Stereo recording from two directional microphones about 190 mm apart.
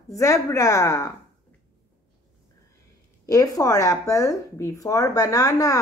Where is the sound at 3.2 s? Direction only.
20° left (ahead or behind).